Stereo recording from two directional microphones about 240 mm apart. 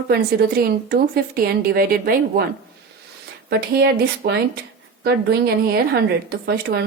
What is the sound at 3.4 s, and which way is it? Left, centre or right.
A woman's voice, right.